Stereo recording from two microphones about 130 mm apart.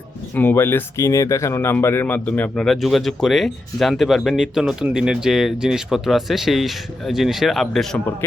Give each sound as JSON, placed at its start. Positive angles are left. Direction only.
{"t": 0.3, "sound": "speech", "side_deg": 15}
{"t": 2.6, "sound": "speech", "side_deg": 0}